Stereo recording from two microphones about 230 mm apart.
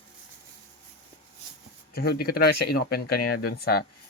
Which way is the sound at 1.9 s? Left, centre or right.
Left.